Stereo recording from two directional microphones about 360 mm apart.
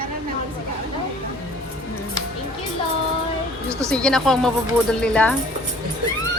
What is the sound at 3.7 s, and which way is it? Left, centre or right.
Speech, centre.